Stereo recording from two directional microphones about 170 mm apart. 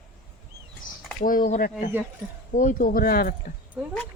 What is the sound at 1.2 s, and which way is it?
Speech, 55° left (ahead or behind).